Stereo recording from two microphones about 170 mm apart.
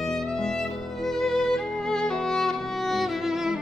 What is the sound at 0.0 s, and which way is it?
Music, 5° left (ahead or behind).